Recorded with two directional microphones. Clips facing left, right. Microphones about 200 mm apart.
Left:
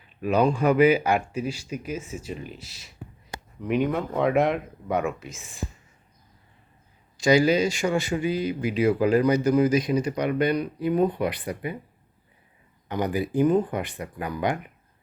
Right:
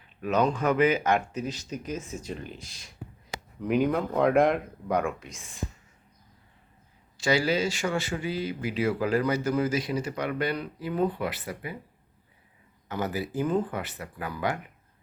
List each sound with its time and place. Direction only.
0.2 s a man's voice: 10° left (ahead or behind)
7.2 s a man's voice: 15° left (ahead or behind)
13.3 s a man's voice: 15° left (ahead or behind)